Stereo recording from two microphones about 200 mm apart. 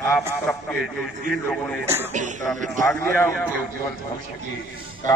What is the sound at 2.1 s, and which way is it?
Speech, 40° right (ahead or behind).